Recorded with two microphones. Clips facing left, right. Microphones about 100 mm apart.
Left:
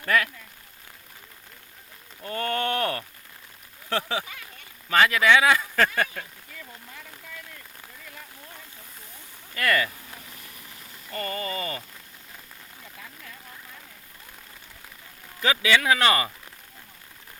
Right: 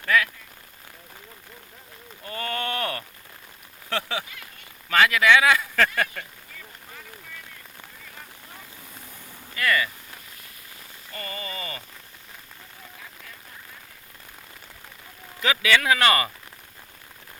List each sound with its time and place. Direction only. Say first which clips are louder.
2.3 s speech: left 3 dB; 35° left (ahead or behind)
9.6 s speech: even; 50° left (ahead or behind)
11.1 s speech: left 5 dB; 45° left (ahead or behind)
15.4 s speech: even; 25° left (ahead or behind)